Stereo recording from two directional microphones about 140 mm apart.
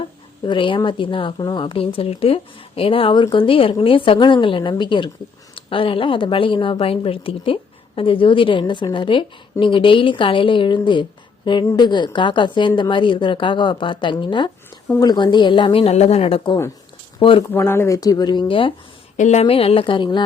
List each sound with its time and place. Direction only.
0.4 s a woman's voice: 35° left (ahead or behind)
17.5 s speech: 15° left (ahead or behind); by 18.7 s 40° left (ahead or behind)
19.1 s a woman's voice: 60° left (ahead or behind); by 20.2 s 35° left (ahead or behind)